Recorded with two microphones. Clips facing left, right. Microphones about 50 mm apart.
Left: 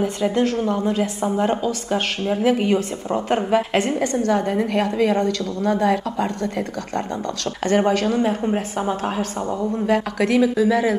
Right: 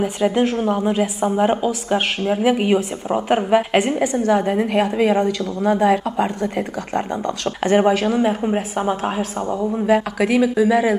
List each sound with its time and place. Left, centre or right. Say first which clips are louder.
0.0 s a woman's voice: right 2 dB; centre
7.6 s a woman's voice: right 2 dB; centre